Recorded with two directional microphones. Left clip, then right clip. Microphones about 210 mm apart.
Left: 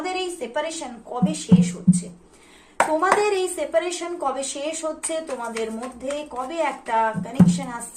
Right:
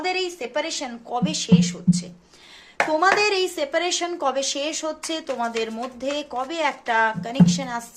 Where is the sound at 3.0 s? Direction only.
45° right (ahead or behind).